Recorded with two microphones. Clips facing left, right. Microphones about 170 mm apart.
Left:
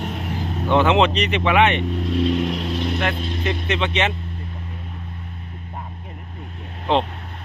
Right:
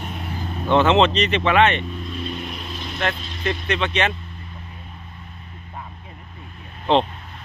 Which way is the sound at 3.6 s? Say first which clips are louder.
Even; 20° left (ahead or behind).